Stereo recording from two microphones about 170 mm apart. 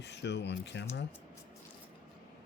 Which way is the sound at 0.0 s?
90° left.